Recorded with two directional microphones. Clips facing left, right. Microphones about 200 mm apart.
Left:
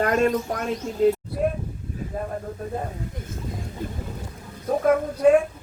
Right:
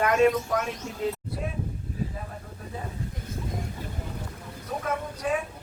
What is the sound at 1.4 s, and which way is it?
Speech, 50° left (ahead or behind).